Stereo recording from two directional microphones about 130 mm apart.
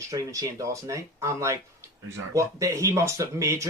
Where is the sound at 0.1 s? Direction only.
25° right (ahead or behind).